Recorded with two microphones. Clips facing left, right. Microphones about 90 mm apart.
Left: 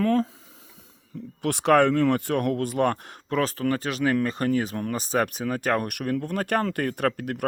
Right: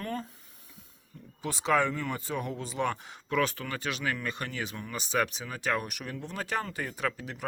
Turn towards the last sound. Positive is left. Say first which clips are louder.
# left 8 dB
turn(degrees=55)  # may be behind; listen again after turning